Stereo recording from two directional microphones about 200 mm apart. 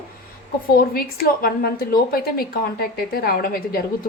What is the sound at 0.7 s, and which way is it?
A woman's voice, 50° left (ahead or behind).